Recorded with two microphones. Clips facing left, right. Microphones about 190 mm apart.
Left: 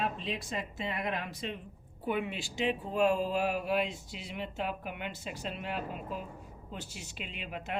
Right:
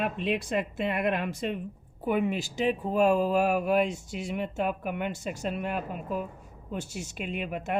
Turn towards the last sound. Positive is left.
turn(degrees=-50)  # may be behind; listen again after turning